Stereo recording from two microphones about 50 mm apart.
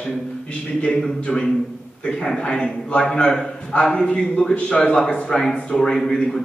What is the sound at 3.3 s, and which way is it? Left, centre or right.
A man's voice, centre.